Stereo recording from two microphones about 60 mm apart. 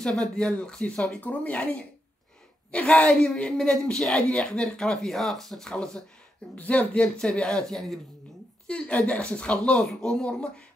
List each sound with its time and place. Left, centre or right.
0.0 s speech: centre
6.5 s speech: left
7.0 s speech: centre